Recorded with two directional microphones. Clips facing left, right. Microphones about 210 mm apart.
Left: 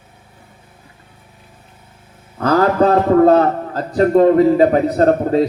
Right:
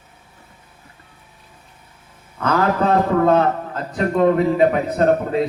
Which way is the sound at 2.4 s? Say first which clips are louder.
Left 5 dB; 35° left (ahead or behind).